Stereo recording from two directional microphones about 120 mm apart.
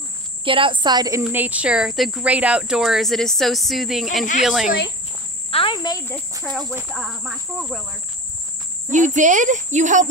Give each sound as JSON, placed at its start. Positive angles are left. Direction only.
{"t": 0.5, "sound": "speech", "side_deg": -45}
{"t": 1.2, "sound": "speech", "side_deg": -15}
{"t": 5.5, "sound": "speech", "side_deg": 50}
{"t": 6.9, "sound": "speech", "side_deg": 0}
{"t": 8.9, "sound": "speech", "side_deg": -90}